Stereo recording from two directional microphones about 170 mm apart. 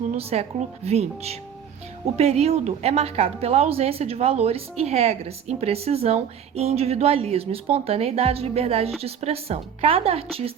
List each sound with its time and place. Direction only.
0.0 s a woman's voice: 40° right (ahead or behind)